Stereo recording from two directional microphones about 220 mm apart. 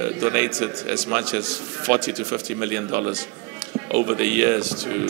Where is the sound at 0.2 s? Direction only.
10° right (ahead or behind).